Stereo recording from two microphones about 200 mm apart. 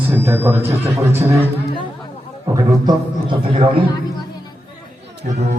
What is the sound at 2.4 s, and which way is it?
A man's voice, 20° right (ahead or behind).